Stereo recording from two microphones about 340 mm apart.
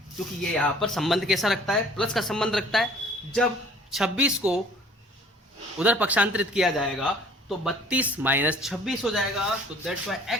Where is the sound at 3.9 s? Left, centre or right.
Centre.